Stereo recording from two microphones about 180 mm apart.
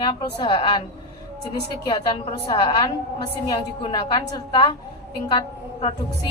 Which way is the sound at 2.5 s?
25° left (ahead or behind).